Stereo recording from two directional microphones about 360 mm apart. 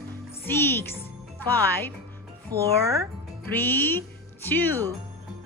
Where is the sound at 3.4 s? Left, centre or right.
Centre.